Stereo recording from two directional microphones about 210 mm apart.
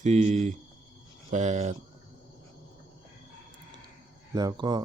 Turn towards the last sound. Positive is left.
turn(degrees=-20)  # may be behind; listen again after turning